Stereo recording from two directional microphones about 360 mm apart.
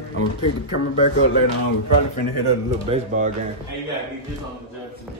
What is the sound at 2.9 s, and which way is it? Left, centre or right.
Speech, centre.